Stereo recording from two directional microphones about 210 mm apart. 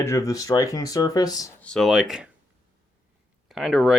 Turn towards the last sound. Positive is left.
turn(degrees=0)  # may be behind; listen again after turning